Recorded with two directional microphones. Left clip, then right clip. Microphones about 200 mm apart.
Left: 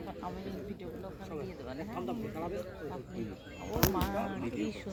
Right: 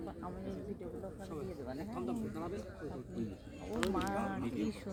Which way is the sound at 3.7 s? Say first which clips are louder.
Left 4 dB; 60° right (ahead or behind).